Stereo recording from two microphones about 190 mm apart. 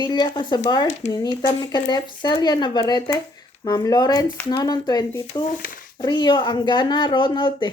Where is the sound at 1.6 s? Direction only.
20° left (ahead or behind).